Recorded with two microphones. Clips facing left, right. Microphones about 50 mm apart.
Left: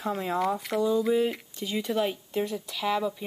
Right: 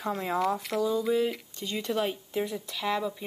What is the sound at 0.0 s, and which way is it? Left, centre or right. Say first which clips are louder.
Speech: left 1 dB; centre.